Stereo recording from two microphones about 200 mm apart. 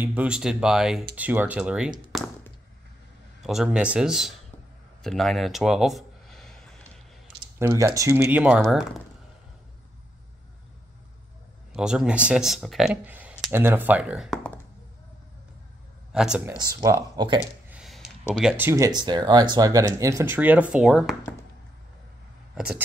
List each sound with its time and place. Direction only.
0.0 s speech: 5° right (ahead or behind)
2.1 s tap: centre (ahead or behind)
3.4 s speech: centre (ahead or behind)
5.0 s a sound: centre (ahead or behind)
7.5 s speech: 15° right (ahead or behind)
11.7 s speech: 5° right (ahead or behind)
16.1 s speech: 5° right (ahead or behind)
16.5 s speech: 15° right (ahead or behind)
17.6 s a sound: centre (ahead or behind)
18.3 s speech: 5° right (ahead or behind)